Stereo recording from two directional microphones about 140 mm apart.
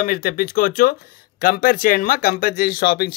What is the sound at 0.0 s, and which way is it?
Speech, 90° left.